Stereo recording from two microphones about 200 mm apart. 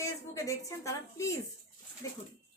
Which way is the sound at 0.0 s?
15° left (ahead or behind).